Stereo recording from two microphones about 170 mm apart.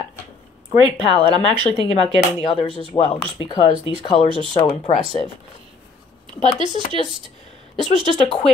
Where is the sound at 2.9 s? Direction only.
20° left (ahead or behind).